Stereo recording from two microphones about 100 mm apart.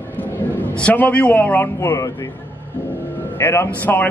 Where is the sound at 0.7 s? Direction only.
15° left (ahead or behind).